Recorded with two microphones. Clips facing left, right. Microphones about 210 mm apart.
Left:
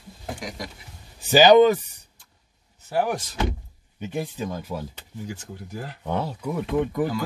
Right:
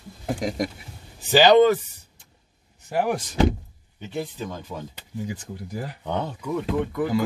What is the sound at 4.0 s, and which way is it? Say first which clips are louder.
Speech: left 1 dB; 15° left (ahead or behind).